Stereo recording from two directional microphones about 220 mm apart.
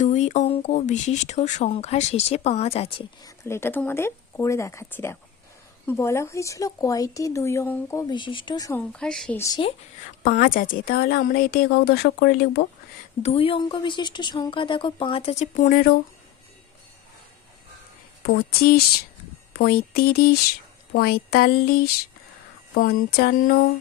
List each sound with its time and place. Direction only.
0.0 s speech: 30° left (ahead or behind)
3.2 s a woman's voice: 10° left (ahead or behind)
8.9 s speech: 5° left (ahead or behind)
9.4 s speech: 20° left (ahead or behind)
10.2 s a woman's voice: 40° left (ahead or behind)
13.2 s speech: 25° left (ahead or behind)
18.3 s a woman's voice: 45° left (ahead or behind)